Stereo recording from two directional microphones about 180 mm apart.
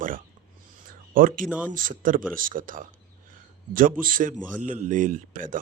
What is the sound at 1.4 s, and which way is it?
Speech, 10° right (ahead or behind).